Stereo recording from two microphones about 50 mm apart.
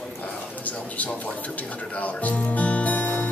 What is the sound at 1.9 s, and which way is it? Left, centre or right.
Speech, left.